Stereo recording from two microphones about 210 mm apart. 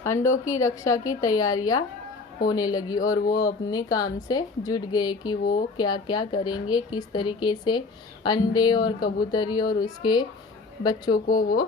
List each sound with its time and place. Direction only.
0.0 s a woman's voice: 10° left (ahead or behind)
5.4 s speech: 45° left (ahead or behind)
5.7 s a woman's voice: 20° left (ahead or behind)
11.3 s speech: 40° left (ahead or behind)